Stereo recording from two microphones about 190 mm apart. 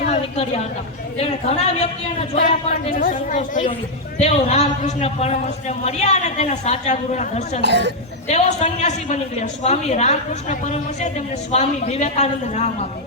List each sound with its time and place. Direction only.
0.0 s a sound: 35° left (ahead or behind)
1.2 s a man's voice: 35° left (ahead or behind)
2.9 s a woman's voice: 45° left (ahead or behind)
7.6 s speech: 65° right (ahead or behind)
8.3 s a man's voice: 35° left (ahead or behind)